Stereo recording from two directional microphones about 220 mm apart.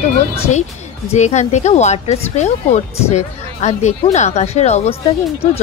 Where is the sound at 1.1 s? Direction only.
30° left (ahead or behind).